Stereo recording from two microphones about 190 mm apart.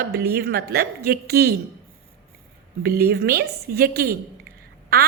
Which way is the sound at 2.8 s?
55° right (ahead or behind).